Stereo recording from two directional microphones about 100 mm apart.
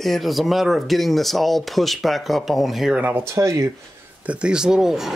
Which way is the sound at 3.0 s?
15° right (ahead or behind).